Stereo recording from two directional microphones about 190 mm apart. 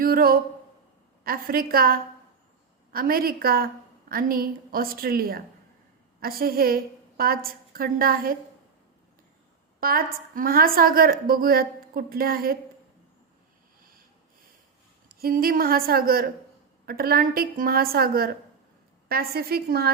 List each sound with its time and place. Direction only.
0.0 s a woman's voice: 50° right (ahead or behind)
9.8 s a woman's voice: 50° right (ahead or behind)
15.1 s a woman's voice: 50° right (ahead or behind)